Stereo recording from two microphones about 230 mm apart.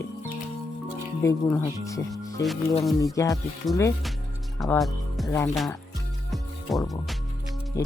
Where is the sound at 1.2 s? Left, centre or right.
Centre.